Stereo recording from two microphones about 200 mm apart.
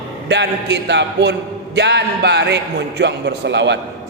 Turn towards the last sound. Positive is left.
turn(degrees=-60)  # may be behind; listen again after turning